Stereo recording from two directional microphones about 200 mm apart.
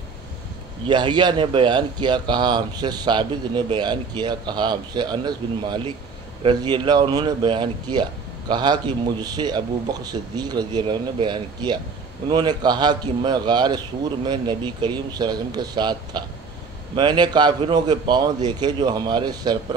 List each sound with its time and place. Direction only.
0.8 s speech: 25° right (ahead or behind)